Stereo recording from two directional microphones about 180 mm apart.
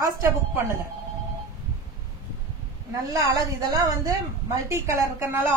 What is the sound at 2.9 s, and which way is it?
A woman's voice, 20° right (ahead or behind).